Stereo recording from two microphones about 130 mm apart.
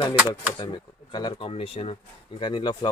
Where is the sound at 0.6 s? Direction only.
35° left (ahead or behind).